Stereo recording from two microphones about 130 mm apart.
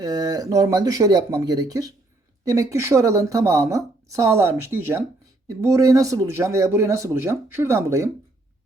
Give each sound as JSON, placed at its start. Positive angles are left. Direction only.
{"t": 0.0, "sound": "a woman's voice", "side_deg": -30}